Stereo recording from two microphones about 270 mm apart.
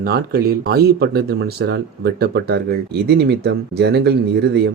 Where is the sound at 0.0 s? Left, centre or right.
Right.